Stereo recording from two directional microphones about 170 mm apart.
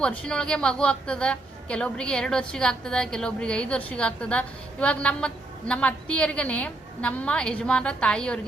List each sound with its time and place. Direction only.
0.0 s a woman's voice: 5° left (ahead or behind)